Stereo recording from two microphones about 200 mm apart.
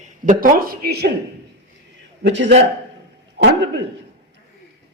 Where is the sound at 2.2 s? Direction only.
65° right (ahead or behind).